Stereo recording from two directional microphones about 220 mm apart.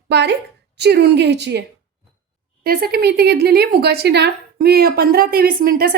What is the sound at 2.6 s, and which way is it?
A woman's voice, 45° right (ahead or behind).